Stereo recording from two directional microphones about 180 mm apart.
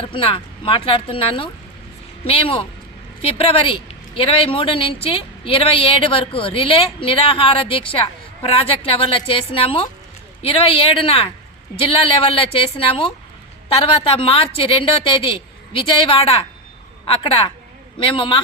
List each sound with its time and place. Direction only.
0.0 s a woman's voice: 30° left (ahead or behind)